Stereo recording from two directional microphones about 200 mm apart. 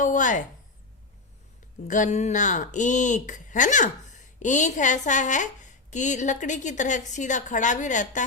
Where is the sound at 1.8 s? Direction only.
40° left (ahead or behind).